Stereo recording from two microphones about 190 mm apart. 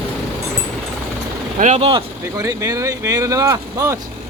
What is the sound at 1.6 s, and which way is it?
Speech, 35° right (ahead or behind).